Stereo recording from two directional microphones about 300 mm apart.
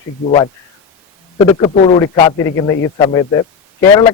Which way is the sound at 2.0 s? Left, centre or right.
Centre.